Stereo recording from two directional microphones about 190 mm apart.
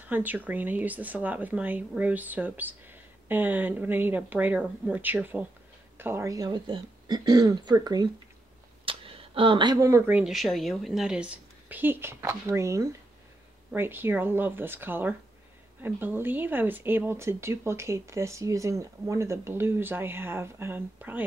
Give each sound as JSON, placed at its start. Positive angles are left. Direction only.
{"t": 0.0, "sound": "speech", "side_deg": -10}